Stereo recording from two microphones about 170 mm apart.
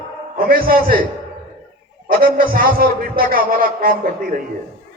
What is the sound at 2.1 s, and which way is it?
A man's voice, 60° right (ahead or behind).